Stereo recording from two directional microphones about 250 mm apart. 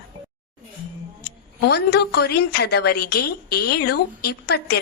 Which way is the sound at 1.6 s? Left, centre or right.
Left.